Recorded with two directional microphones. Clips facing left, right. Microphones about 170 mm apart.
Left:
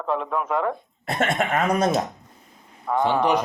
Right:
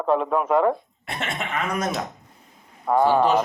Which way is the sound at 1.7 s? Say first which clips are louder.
Left 5 dB; 30° left (ahead or behind).